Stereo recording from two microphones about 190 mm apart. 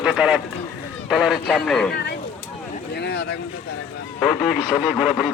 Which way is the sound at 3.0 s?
60° left (ahead or behind).